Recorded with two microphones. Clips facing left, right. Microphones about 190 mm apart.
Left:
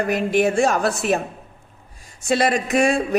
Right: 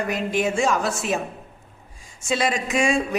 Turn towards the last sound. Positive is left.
turn(degrees=60)  # may be behind; listen again after turning